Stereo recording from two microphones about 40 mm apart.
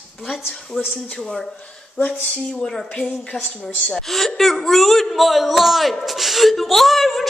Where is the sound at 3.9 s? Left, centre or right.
Centre.